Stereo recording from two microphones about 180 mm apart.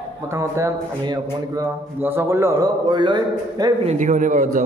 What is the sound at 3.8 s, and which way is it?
Speech, 45° right (ahead or behind).